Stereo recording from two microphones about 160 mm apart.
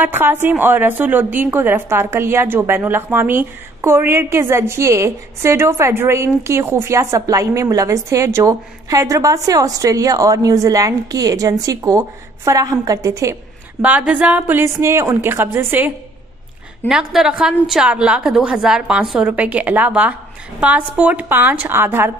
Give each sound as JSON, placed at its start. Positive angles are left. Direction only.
{"t": 0.0, "sound": "a woman's voice", "side_deg": -10}
{"t": 13.8, "sound": "a woman's voice", "side_deg": -10}